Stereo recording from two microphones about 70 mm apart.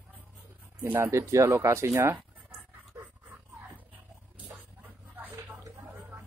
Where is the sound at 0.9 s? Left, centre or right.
Right.